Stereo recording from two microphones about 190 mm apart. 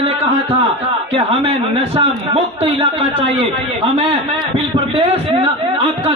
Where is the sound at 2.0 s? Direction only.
30° right (ahead or behind).